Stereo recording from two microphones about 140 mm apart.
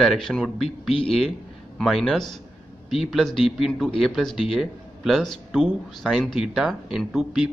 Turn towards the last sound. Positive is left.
turn(degrees=0)  # may be behind; listen again after turning